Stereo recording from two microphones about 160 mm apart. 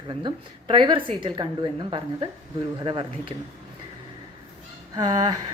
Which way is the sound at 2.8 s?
30° right (ahead or behind).